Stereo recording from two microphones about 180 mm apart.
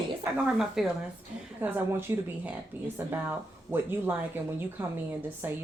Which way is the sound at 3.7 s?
10° right (ahead or behind).